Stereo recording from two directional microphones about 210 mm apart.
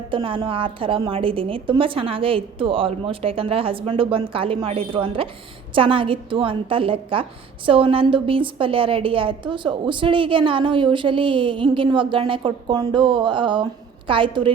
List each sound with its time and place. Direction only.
0.1 s a woman's voice: 25° right (ahead or behind)